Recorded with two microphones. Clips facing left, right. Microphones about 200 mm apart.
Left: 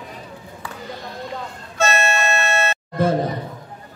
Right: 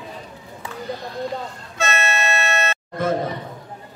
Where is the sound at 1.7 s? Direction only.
40° left (ahead or behind).